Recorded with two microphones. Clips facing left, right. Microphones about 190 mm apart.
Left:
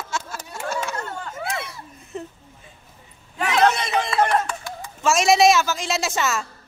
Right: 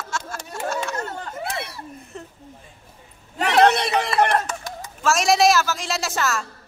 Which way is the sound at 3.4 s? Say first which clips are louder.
Right 3 dB; 65° right (ahead or behind).